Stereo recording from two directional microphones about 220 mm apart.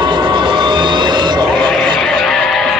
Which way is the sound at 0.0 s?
20° right (ahead or behind).